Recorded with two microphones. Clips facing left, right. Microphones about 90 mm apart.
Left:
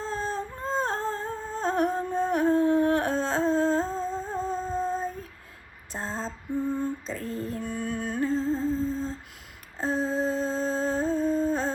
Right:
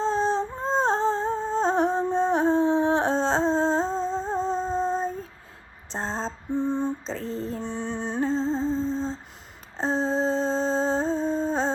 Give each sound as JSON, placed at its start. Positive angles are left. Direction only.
{"t": 0.0, "sound": "music", "side_deg": -25}
{"t": 2.6, "sound": "humming", "side_deg": -25}
{"t": 6.0, "sound": "lullaby", "side_deg": -30}
{"t": 7.2, "sound": "a sound", "side_deg": 55}
{"t": 7.6, "sound": "music", "side_deg": -30}
{"t": 8.9, "sound": "humming", "side_deg": -30}
{"t": 9.7, "sound": "a sound", "side_deg": -30}
{"t": 10.0, "sound": "a sound", "side_deg": 5}
{"t": 10.5, "sound": "music", "side_deg": -30}
{"t": 11.2, "sound": "humming", "side_deg": -30}